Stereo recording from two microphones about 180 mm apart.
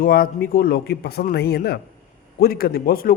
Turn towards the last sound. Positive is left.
turn(degrees=55)  # may be behind; listen again after turning